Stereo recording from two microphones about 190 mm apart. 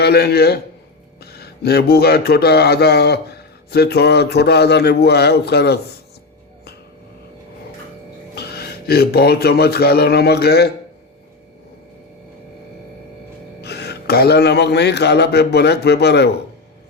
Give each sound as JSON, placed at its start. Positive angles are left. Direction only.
{"t": 0.0, "sound": "speech", "side_deg": 55}
{"t": 8.4, "sound": "speech", "side_deg": 55}
{"t": 13.6, "sound": "speech", "side_deg": 60}